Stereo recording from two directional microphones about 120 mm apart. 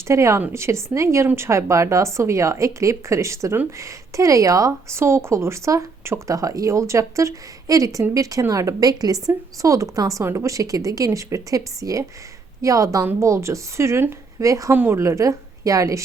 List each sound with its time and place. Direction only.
0.1 s speech: 25° right (ahead or behind)